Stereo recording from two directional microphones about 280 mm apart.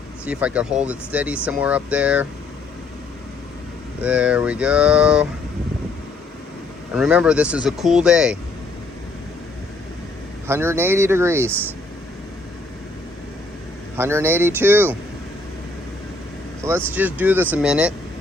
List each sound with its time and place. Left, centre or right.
0.3 s speech: centre
4.0 s speech: centre
6.9 s speech: centre
10.4 s speech: centre
13.9 s speech: centre
16.6 s speech: centre